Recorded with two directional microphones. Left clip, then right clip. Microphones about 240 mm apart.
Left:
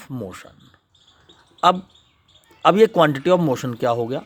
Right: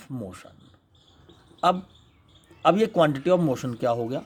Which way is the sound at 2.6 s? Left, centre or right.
Centre.